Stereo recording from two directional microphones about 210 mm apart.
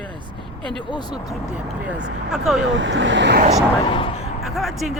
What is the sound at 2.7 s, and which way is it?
Speech, 60° right (ahead or behind).